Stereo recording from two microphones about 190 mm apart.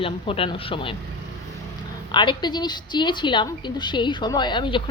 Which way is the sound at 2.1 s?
25° left (ahead or behind).